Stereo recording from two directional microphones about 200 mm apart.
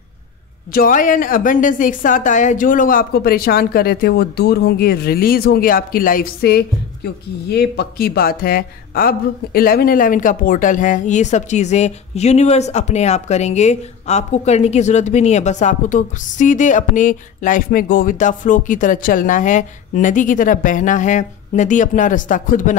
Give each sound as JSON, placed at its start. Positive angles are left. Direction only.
{"t": 0.7, "sound": "a woman's voice", "side_deg": 45}